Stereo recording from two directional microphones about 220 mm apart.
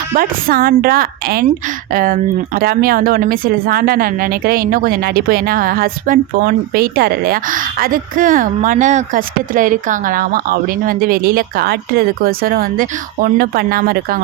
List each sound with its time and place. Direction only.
0.1 s speech: 40° right (ahead or behind)